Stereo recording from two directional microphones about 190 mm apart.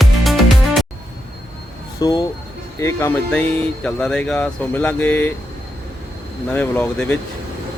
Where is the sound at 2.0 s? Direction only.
20° left (ahead or behind).